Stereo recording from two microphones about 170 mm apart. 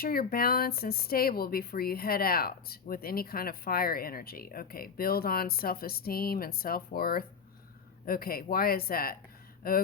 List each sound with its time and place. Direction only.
0.0 s speech: 60° left (ahead or behind)